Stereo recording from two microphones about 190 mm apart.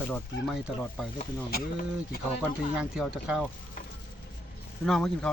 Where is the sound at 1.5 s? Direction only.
55° left (ahead or behind).